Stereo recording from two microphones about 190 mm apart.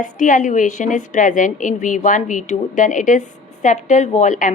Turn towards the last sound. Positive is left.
turn(degrees=40)  # may be behind; listen again after turning